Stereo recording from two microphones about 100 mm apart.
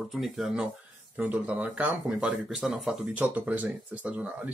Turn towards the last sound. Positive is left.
turn(degrees=-15)  # may be behind; listen again after turning